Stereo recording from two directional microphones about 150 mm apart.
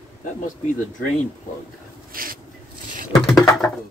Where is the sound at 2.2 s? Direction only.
75° right (ahead or behind).